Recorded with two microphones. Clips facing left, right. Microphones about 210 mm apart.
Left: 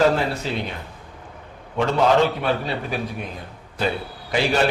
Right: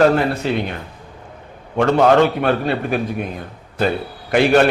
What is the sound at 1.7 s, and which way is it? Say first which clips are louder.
A man's voice: right 5 dB; 55° right (ahead or behind).